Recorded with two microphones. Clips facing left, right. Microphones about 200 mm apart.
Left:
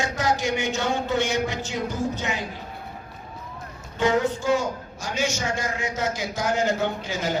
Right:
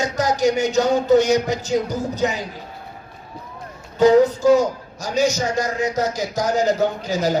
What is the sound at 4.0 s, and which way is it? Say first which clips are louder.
A man's voice: right 9 dB; 40° right (ahead or behind).